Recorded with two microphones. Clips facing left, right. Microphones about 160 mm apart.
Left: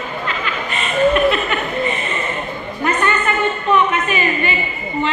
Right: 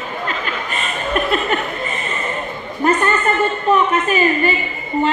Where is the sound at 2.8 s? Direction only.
40° right (ahead or behind).